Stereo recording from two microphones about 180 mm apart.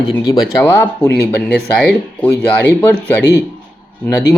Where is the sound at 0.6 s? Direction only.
10° left (ahead or behind).